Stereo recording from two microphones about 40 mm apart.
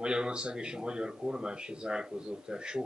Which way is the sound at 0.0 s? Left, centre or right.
Right.